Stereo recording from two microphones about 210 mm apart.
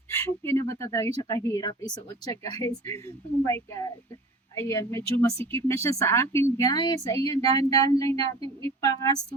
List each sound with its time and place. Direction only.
0.1 s speech: 10° left (ahead or behind)